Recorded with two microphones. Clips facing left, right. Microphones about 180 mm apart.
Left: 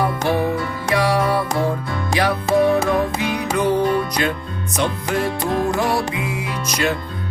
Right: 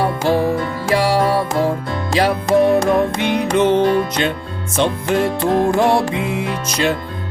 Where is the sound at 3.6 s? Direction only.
80° right.